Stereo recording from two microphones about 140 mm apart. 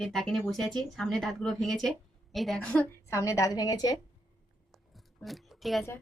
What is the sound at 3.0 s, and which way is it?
Speech, 20° left (ahead or behind).